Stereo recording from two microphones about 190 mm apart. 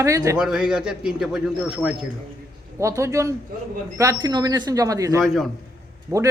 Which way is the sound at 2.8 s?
15° right (ahead or behind).